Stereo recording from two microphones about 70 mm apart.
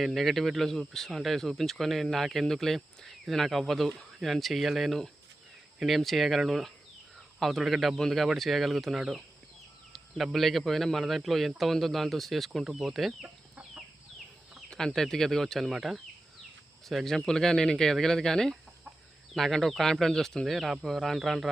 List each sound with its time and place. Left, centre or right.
0.0 s speech: centre
10.3 s speech: centre
13.2 s chicken: centre
14.7 s speech: centre